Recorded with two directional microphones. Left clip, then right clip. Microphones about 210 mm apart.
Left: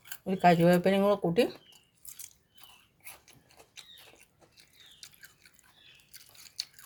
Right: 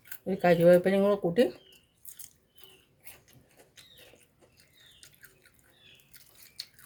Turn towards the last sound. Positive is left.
turn(degrees=30)  # may be behind; listen again after turning